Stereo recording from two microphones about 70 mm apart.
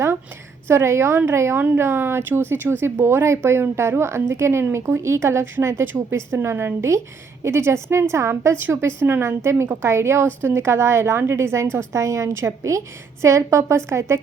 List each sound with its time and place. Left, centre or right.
0.7 s a woman's voice: right